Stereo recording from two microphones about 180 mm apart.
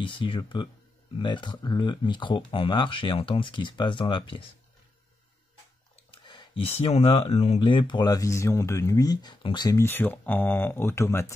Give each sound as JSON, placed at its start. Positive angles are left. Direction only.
{"t": 0.0, "sound": "speech", "side_deg": 30}
{"t": 6.2, "sound": "speech", "side_deg": 25}